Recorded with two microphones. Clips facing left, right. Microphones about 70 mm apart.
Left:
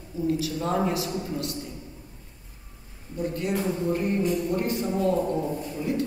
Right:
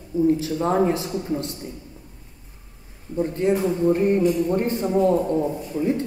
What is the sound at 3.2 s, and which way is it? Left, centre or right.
A man's voice, right.